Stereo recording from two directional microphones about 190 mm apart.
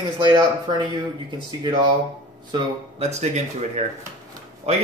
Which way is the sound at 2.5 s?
35° right (ahead or behind).